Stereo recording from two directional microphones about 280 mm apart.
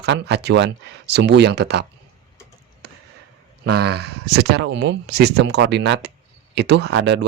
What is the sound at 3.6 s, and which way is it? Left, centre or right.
Speech, right.